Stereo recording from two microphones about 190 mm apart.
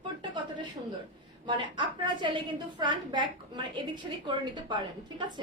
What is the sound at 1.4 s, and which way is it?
A woman's voice, 25° right (ahead or behind).